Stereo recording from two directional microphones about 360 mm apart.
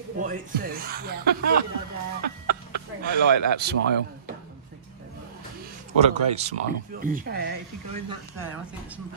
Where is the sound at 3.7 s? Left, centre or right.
Right.